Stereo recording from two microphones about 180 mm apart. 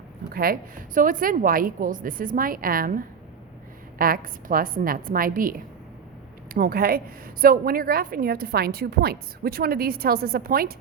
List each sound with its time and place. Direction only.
0.3 s a woman's voice: 55° right (ahead or behind)